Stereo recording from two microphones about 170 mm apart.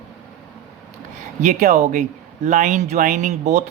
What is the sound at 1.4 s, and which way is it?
Speech, 45° right (ahead or behind).